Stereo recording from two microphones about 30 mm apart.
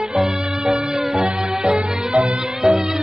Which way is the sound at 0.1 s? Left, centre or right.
Right.